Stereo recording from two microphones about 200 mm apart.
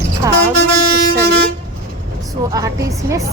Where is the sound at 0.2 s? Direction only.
15° right (ahead or behind).